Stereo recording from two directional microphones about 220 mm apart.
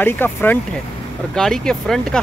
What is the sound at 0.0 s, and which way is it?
Speech, 10° left (ahead or behind).